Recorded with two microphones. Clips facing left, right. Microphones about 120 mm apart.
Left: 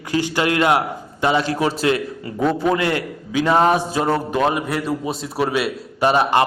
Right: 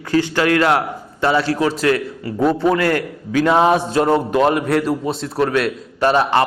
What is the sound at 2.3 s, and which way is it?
Speech, 10° right (ahead or behind).